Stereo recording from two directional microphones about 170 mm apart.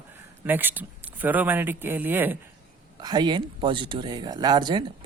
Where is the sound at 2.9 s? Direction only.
25° right (ahead or behind).